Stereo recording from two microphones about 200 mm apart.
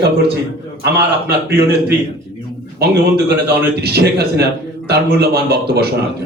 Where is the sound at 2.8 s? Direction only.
55° right (ahead or behind).